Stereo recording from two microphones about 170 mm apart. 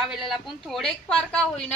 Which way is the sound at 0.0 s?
Centre (ahead or behind).